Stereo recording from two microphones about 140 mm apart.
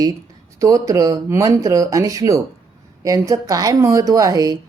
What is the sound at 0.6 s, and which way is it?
Speech, 25° right (ahead or behind).